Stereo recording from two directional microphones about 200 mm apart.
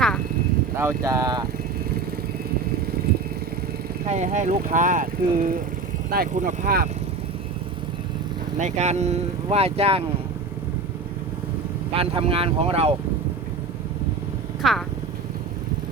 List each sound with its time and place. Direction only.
0.8 s speech: 15° right (ahead or behind)
4.0 s speech: 35° right (ahead or behind)
8.5 s speech: 35° right (ahead or behind)
11.9 s speech: 30° right (ahead or behind)
14.6 s speech: centre (ahead or behind)